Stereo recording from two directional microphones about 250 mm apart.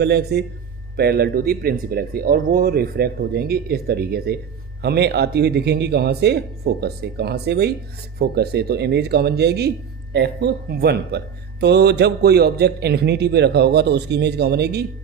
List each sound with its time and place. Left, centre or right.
0.0 s speech: right